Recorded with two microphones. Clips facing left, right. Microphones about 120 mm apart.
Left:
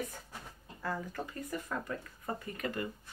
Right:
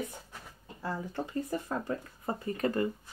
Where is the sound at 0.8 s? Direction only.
25° right (ahead or behind).